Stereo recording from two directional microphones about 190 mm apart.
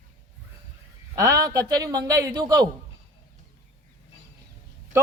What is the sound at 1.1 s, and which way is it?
A man's voice, 15° right (ahead or behind).